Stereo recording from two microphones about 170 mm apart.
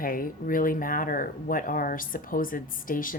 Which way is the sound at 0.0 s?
55° left (ahead or behind).